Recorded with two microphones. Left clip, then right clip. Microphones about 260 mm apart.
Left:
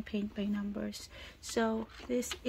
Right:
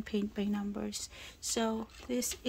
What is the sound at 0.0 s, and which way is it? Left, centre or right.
Speech, centre.